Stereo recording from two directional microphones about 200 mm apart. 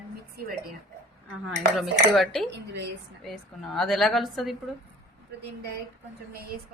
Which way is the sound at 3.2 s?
Centre (ahead or behind).